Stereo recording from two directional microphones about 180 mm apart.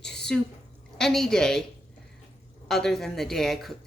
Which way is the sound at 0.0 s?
70° left (ahead or behind).